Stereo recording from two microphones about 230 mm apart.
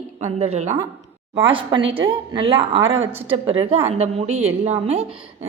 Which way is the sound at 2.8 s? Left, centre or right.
Right.